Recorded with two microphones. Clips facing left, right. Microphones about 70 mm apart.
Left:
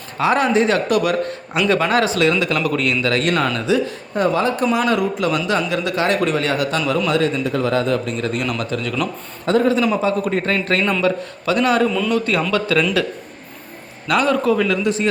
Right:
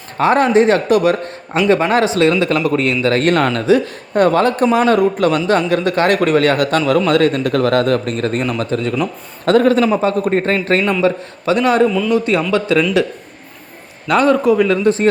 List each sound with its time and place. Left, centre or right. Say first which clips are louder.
0.2 s a man's voice: right 4 dB; right
8.4 s a man's voice: right 4 dB; right
9.5 s a man's voice: right 5 dB; right
9.8 s a man's voice: right 3 dB; right
11.9 s a man's voice: right 3 dB; centre
12.1 s a man's voice: right 4 dB; right
14.1 s a man's voice: right 4 dB; right